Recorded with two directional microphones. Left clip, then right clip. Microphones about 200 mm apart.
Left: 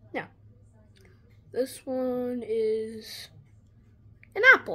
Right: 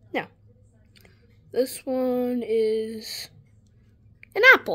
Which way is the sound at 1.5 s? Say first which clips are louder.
Right 5 dB; 50° right (ahead or behind).